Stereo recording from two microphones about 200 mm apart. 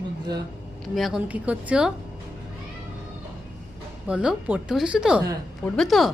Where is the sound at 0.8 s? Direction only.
Centre (ahead or behind).